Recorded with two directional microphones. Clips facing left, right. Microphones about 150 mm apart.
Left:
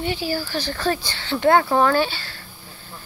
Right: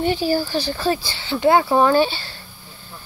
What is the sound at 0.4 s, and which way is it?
Speech, 15° right (ahead or behind).